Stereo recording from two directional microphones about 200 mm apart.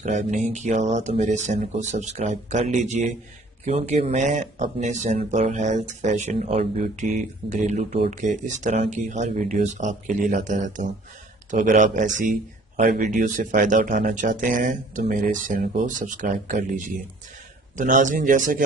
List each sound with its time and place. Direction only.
0.0 s speech: 35° right (ahead or behind)